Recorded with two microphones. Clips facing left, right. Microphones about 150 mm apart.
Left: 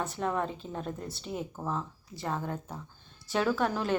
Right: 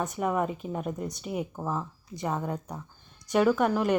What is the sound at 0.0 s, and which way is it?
A woman's voice, 10° right (ahead or behind).